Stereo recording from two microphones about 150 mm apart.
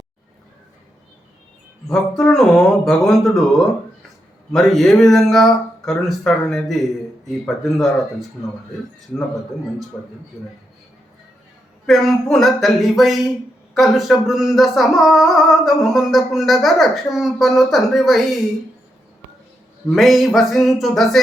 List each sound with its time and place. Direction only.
1.9 s speech: 5° left (ahead or behind)
4.5 s speech: centre (ahead or behind)
9.9 s speech: 10° left (ahead or behind)
11.9 s speech: centre (ahead or behind)
19.9 s speech: centre (ahead or behind)